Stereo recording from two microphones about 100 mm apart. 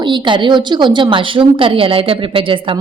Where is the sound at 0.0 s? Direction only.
50° right (ahead or behind).